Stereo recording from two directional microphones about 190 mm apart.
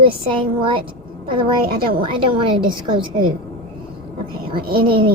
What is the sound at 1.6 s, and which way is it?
Speech, 50° right (ahead or behind).